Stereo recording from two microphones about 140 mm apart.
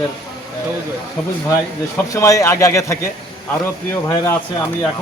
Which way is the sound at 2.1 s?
25° left (ahead or behind).